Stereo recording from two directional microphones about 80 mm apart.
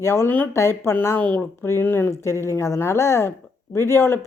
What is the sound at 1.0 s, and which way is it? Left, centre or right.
Speech, left.